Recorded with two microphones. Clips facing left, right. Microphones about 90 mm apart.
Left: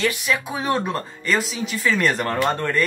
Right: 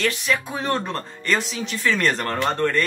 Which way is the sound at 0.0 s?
5° left (ahead or behind).